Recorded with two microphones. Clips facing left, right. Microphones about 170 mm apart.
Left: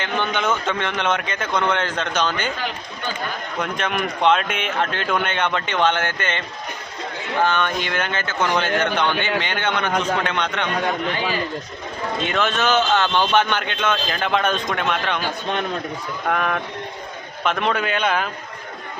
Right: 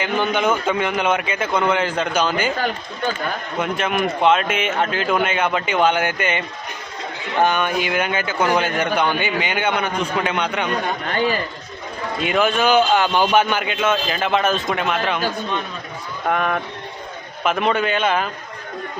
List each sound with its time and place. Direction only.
0.0 s a man's voice: 10° right (ahead or behind)
2.6 s speech: 45° right (ahead or behind)
3.6 s speech: 5° right (ahead or behind)
7.4 s a man's voice: 10° right (ahead or behind)
12.2 s a man's voice: 10° right (ahead or behind)
16.2 s speech: centre (ahead or behind)